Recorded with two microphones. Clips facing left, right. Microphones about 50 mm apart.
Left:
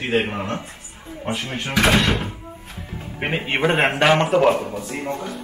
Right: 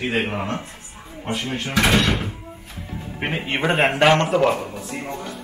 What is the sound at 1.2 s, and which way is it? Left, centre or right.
Speech, centre.